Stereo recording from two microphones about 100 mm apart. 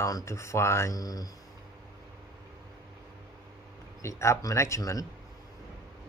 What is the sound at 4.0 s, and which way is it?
Speech, 30° left (ahead or behind).